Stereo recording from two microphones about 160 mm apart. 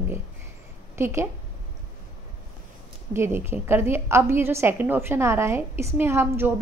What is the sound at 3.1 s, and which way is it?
A woman's voice, 15° right (ahead or behind).